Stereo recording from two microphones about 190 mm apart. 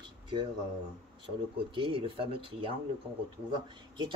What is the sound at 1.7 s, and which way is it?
Speech, 30° right (ahead or behind).